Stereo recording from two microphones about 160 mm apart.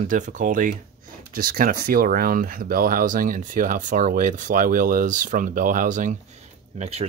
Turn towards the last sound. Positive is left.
turn(degrees=-45)  # may be behind; listen again after turning